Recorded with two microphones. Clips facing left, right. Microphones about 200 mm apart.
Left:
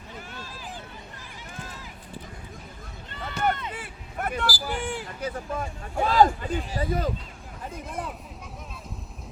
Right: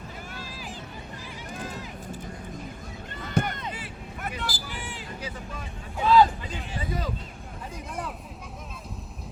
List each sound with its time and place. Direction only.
3.4 s run: 55° right (ahead or behind)
3.8 s vehicle: 50° left (ahead or behind)
4.6 s speech: 55° left (ahead or behind)